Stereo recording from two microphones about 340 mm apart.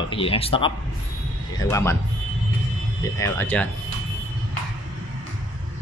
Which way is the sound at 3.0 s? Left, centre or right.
Centre.